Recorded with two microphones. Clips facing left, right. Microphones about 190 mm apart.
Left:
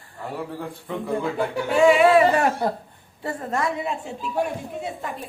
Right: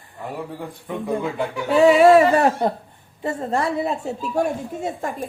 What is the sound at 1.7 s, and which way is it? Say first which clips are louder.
Speech: right 3 dB; 40° right (ahead or behind).